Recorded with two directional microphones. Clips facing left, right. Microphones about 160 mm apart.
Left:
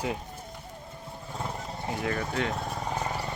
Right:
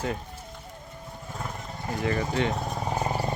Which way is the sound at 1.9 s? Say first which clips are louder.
Right 3 dB; centre (ahead or behind).